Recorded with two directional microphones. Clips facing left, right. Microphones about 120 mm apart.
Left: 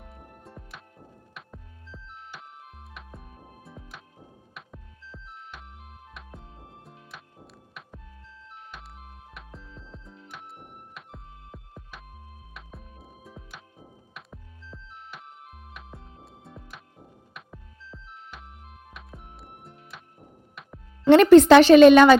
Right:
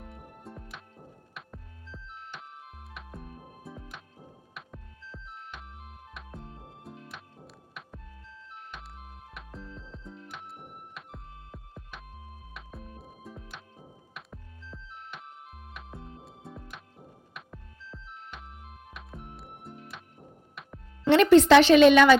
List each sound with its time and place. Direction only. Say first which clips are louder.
0.0 s music: right 2 dB; centre (ahead or behind)
9.3 s music: right 4 dB; centre (ahead or behind)
21.1 s a woman's voice: left 5 dB; 45° left (ahead or behind)